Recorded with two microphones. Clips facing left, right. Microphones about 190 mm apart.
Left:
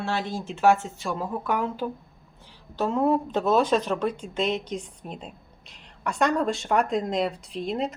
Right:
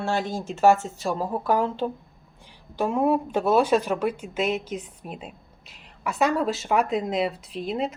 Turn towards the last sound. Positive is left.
turn(degrees=0)  # may be behind; listen again after turning